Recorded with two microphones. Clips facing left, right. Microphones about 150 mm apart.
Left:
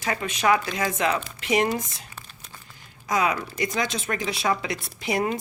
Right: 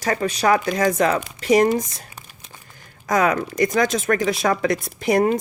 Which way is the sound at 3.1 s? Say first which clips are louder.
Right 5 dB; 45° right (ahead or behind).